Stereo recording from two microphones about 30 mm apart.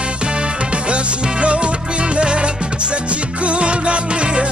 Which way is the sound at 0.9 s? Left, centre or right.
Right.